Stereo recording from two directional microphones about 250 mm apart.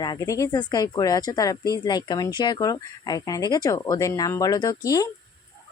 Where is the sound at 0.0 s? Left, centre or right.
Centre.